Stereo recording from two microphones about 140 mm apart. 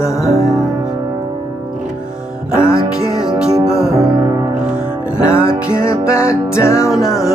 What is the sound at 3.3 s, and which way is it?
Music, 5° right (ahead or behind).